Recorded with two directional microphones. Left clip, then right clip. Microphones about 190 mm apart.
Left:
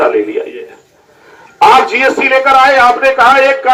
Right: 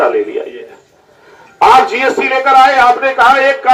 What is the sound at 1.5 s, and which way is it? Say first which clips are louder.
A man's voice: left 1 dB; 45° right (ahead or behind).